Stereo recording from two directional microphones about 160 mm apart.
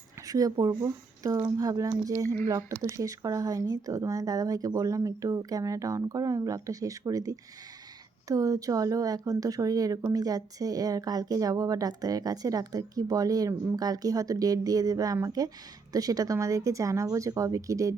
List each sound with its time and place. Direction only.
0.3 s speech: 20° right (ahead or behind)